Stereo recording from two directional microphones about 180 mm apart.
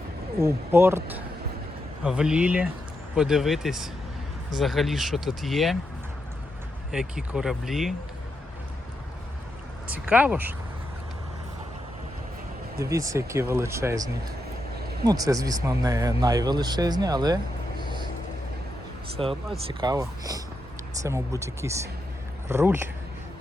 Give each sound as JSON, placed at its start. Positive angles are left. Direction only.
{"t": 0.3, "sound": "speech", "side_deg": -15}
{"t": 6.9, "sound": "speech", "side_deg": -5}
{"t": 9.8, "sound": "speech", "side_deg": -10}
{"t": 12.8, "sound": "speech", "side_deg": -15}
{"t": 19.1, "sound": "speech", "side_deg": -30}